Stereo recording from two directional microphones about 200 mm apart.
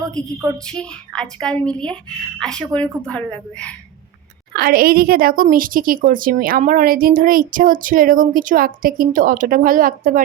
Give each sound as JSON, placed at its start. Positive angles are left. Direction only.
{"t": 0.1, "sound": "a woman's voice", "side_deg": 5}
{"t": 4.5, "sound": "a woman's voice", "side_deg": -50}